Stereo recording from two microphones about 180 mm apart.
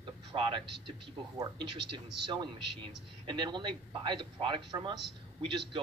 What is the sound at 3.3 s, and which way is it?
A man's voice, 25° right (ahead or behind).